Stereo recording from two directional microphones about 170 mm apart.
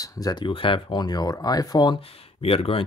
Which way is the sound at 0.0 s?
20° left (ahead or behind).